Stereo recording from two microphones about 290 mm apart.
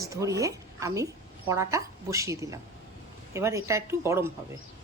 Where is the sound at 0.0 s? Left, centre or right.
Centre.